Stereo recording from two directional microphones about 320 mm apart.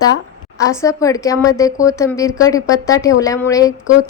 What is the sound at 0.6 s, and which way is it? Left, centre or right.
A woman's voice, centre.